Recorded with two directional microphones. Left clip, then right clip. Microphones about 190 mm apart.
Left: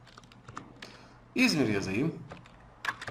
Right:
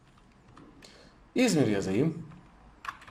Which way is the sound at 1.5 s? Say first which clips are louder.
Right 2 dB; 20° right (ahead or behind).